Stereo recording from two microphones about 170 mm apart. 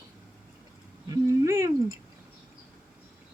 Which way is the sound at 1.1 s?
15° right (ahead or behind).